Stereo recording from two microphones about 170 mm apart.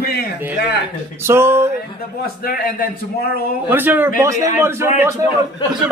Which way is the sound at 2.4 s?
60° left (ahead or behind).